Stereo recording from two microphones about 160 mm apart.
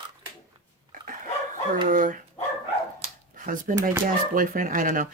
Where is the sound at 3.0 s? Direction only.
60° right (ahead or behind).